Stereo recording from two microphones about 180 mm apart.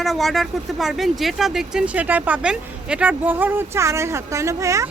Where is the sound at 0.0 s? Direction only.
Centre (ahead or behind).